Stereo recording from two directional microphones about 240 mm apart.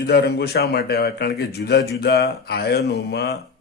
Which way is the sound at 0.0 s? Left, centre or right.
Left.